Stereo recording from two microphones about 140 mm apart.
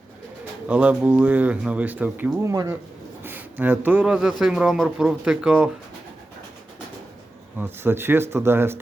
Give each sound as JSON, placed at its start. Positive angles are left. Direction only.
{"t": 0.7, "sound": "speech", "side_deg": -10}
{"t": 7.6, "sound": "speech", "side_deg": -15}